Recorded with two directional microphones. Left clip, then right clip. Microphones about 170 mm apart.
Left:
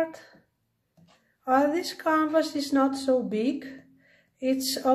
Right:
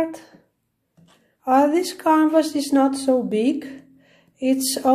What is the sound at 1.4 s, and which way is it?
Speech, 20° right (ahead or behind).